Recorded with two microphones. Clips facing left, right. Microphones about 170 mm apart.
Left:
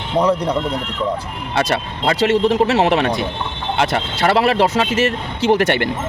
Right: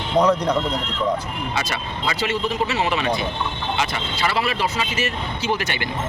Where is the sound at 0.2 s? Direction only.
10° left (ahead or behind).